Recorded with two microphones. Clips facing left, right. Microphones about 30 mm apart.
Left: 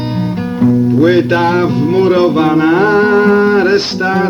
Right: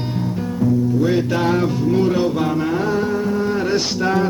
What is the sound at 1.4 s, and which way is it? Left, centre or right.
Music, left.